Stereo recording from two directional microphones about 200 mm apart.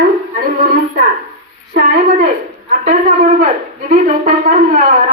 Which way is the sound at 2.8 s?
40° right (ahead or behind).